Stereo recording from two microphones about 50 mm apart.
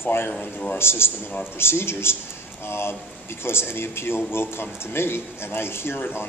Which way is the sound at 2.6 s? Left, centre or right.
Left.